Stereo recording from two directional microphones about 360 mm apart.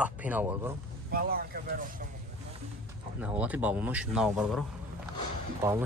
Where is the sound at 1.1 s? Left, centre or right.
Right.